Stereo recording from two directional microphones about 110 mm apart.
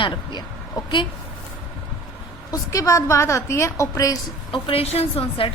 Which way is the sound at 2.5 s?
30° left (ahead or behind).